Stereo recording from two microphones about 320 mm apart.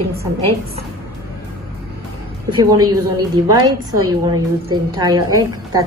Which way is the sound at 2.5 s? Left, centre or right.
Centre.